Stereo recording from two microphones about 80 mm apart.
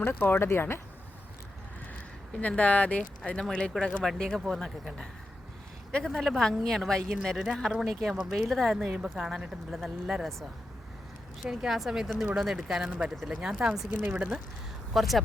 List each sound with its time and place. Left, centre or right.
0.0 s speech: left
2.3 s speech: centre
11.4 s speech: centre
14.9 s speech: centre